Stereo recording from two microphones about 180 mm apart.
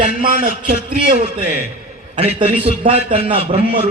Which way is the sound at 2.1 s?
30° right (ahead or behind).